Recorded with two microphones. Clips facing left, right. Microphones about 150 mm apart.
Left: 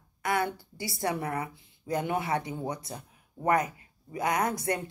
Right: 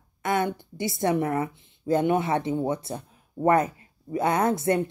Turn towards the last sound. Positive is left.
turn(degrees=-25)  # may be behind; listen again after turning